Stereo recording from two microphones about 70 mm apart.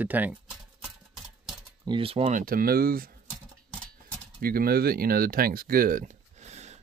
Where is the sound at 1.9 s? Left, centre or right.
Right.